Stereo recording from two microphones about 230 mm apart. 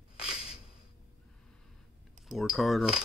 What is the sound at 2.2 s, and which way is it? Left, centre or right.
Speech, centre.